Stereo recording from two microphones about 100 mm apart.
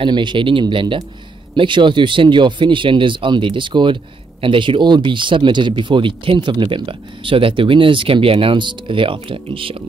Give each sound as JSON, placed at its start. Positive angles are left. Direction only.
{"t": 0.0, "sound": "speech", "side_deg": -50}